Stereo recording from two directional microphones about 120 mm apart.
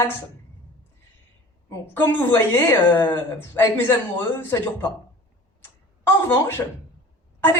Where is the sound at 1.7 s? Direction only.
20° left (ahead or behind).